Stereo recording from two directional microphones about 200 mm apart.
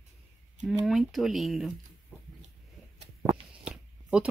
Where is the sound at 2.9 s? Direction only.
30° right (ahead or behind).